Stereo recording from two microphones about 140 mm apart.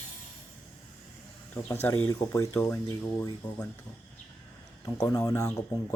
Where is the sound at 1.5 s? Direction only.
15° left (ahead or behind).